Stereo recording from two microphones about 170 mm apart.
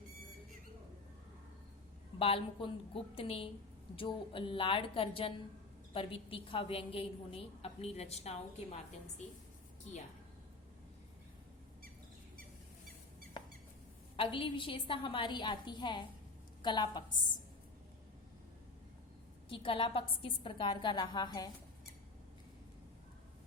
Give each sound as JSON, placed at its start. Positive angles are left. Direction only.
{"t": 2.1, "sound": "a woman's voice", "side_deg": 35}
{"t": 14.2, "sound": "a woman's voice", "side_deg": 30}
{"t": 19.5, "sound": "a woman's voice", "side_deg": 30}